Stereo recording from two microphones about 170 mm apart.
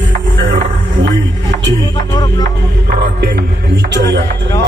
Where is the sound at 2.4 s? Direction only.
65° right (ahead or behind).